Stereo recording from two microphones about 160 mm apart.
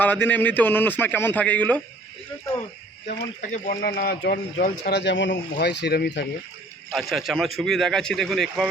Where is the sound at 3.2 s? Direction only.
55° left (ahead or behind); by 6.3 s 90° left.